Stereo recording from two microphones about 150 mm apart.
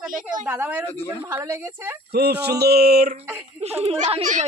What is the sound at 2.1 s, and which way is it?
Speech, 90° right.